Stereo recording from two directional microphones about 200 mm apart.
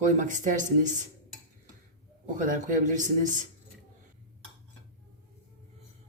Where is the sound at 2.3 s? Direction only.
40° right (ahead or behind).